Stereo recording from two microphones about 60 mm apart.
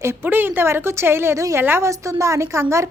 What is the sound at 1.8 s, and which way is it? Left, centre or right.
A woman's voice, right.